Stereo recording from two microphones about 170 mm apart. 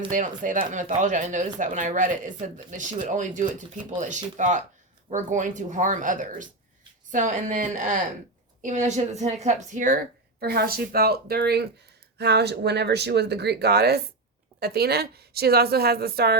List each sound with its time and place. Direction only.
0.1 s speech: 50° right (ahead or behind)
10.4 s speech: 60° right (ahead or behind)